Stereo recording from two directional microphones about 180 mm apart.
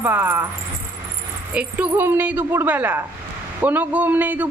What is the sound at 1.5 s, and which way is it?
Speech, 10° right (ahead or behind).